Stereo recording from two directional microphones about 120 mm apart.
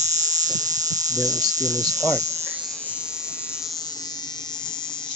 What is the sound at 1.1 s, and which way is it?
Hum, 30° right (ahead or behind).